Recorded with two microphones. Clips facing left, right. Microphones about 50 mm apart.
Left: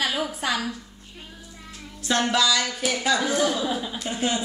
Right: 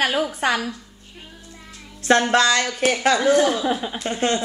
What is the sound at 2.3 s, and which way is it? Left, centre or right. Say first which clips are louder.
Speech: right 4 dB; right.